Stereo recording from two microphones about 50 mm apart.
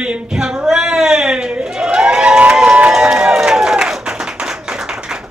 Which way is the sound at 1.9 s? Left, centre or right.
Centre.